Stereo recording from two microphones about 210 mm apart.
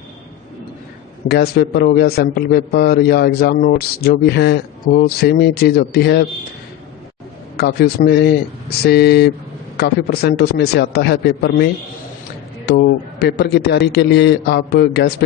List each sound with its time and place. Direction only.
1.3 s a man's voice: 50° left (ahead or behind)
7.5 s a man's voice: 50° left (ahead or behind)